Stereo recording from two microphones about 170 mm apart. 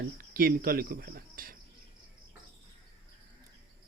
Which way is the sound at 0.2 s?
60° right (ahead or behind).